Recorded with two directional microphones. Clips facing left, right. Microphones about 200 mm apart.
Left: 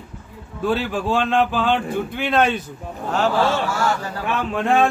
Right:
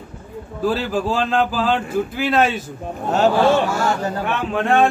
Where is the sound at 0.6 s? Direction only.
Centre (ahead or behind).